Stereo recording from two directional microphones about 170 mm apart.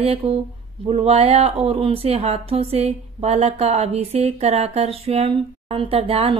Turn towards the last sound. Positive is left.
turn(degrees=-35)  # may be behind; listen again after turning